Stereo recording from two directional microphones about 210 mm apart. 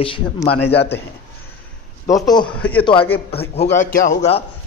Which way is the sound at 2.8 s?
25° left (ahead or behind).